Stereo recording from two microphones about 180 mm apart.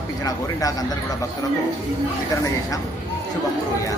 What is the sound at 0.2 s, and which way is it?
Speech, 20° left (ahead or behind).